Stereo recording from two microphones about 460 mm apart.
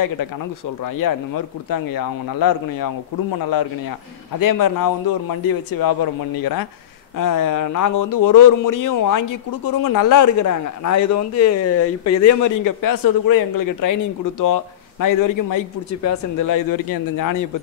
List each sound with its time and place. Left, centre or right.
0.8 s a man's voice: left
4.4 s a man's voice: left